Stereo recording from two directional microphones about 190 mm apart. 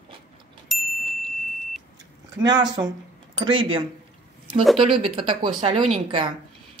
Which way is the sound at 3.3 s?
25° right (ahead or behind).